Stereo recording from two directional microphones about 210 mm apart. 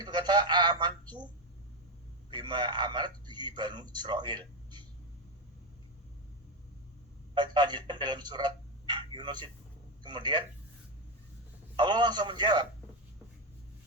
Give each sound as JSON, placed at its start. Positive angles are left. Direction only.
{"t": 0.0, "sound": "a man's voice", "side_deg": -20}
{"t": 2.3, "sound": "a man's voice", "side_deg": -20}
{"t": 7.3, "sound": "a man's voice", "side_deg": -20}
{"t": 11.8, "sound": "a man's voice", "side_deg": -20}